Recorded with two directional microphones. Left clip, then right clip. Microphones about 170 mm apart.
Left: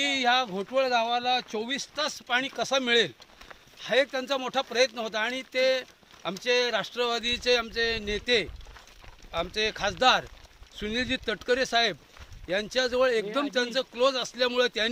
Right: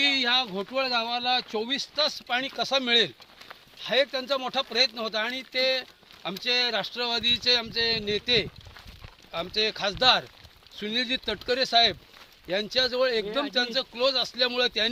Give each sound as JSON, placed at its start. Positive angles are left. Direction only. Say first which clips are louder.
{"t": 0.0, "sound": "speech", "louder": "right 1 dB", "side_deg": 20}